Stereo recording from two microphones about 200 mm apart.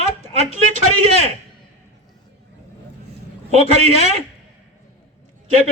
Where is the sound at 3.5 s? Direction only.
30° right (ahead or behind).